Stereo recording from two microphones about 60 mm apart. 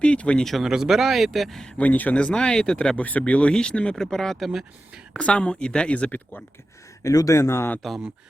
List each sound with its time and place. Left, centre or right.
0.0 s speech: centre
0.6 s a man's voice: centre
1.8 s speech: left; by 4.6 s centre
5.1 s speech: centre
7.1 s speech: left
7.3 s speech: left
7.8 s a man's voice: centre